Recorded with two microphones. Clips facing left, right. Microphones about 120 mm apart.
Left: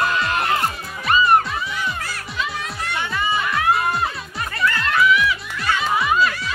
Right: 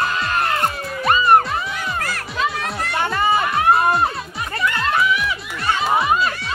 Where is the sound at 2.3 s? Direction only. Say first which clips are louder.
Right 5 dB; 55° right (ahead or behind).